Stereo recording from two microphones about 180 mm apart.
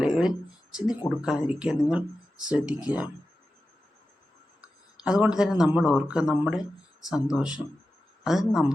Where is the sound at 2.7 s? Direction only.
20° left (ahead or behind).